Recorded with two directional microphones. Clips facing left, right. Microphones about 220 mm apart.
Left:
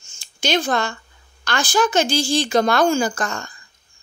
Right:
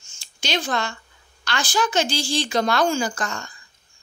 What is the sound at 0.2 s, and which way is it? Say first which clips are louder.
A woman's voice: left 6 dB; 50° left (ahead or behind).